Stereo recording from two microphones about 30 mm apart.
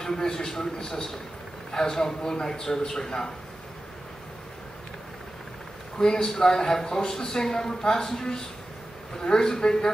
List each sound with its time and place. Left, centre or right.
0.0 s speech: centre
5.9 s speech: left
9.2 s speech: left